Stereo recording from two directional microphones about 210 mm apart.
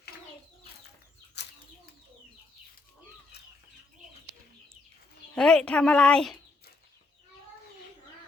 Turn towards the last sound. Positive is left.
turn(degrees=0)  # may be behind; listen again after turning